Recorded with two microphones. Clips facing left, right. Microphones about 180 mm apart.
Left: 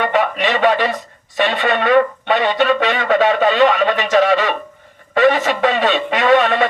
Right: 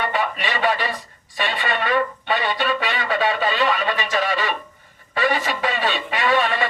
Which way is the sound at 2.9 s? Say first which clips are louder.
Left 7 dB; 55° left (ahead or behind).